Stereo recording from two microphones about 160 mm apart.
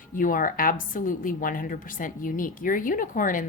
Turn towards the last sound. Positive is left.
turn(degrees=55)  # may be behind; listen again after turning